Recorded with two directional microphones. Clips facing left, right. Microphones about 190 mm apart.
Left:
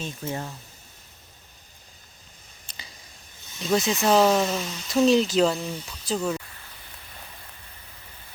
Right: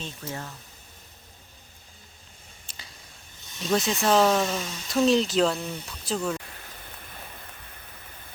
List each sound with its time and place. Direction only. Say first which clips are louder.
0.3 s speech: left 5 dB; 25° left (ahead or behind)
3.6 s speech: left 2 dB; centre (ahead or behind)